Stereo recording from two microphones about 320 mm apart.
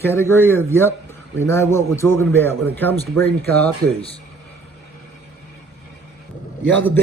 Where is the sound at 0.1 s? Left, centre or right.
Centre.